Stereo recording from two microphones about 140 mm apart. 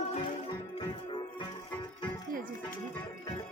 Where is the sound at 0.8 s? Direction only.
35° left (ahead or behind).